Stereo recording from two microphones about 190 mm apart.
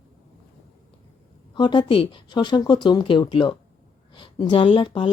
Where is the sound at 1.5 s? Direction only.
25° left (ahead or behind).